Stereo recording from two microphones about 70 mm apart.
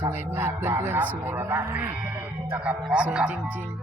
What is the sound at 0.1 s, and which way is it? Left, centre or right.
Speech, right.